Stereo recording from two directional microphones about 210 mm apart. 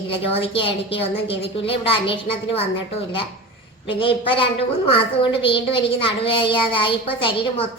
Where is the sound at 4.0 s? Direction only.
25° left (ahead or behind).